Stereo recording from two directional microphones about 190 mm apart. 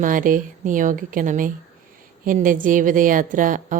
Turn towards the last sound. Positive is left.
turn(degrees=-45)  # may be behind; listen again after turning